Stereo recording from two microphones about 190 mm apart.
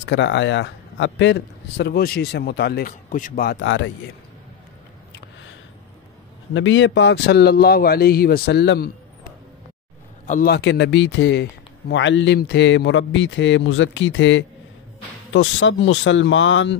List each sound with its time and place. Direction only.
0.0 s a man's voice: 70° left (ahead or behind); by 3.5 s 50° left (ahead or behind)
3.6 s speech: 80° left
6.5 s a man's voice: 80° left; by 8.9 s 55° left (ahead or behind)
10.2 s a man's voice: 40° left (ahead or behind)
10.5 s a man's voice: 65° left (ahead or behind); by 16.7 s 80° left